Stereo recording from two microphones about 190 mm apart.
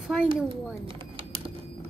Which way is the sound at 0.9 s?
30° right (ahead or behind).